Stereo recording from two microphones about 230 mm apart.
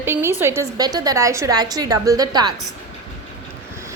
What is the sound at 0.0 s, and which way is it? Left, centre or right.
A woman's voice, centre.